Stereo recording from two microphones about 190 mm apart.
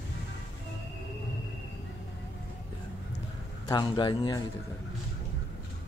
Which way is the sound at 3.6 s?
25° left (ahead or behind).